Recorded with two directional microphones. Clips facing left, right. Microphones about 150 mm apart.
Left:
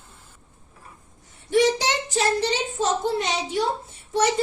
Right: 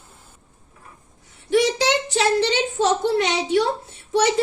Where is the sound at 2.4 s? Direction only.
80° right.